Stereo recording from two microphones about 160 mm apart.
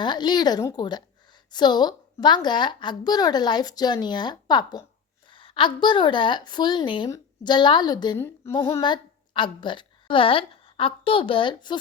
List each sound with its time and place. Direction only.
0.0 s a woman's voice: 30° left (ahead or behind)
8.2 s a sound: 15° left (ahead or behind)
8.8 s a woman's voice: 30° left (ahead or behind)